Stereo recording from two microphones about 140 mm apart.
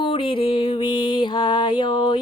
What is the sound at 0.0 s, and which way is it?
Music, 40° left (ahead or behind).